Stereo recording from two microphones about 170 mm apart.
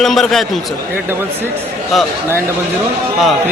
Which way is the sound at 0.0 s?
Centre (ahead or behind).